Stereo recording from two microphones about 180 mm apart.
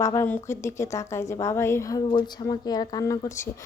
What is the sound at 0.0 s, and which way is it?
A woman's voice, 15° left (ahead or behind).